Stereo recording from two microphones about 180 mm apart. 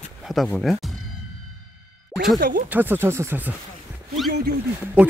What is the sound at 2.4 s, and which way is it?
Speech, 50° right (ahead or behind).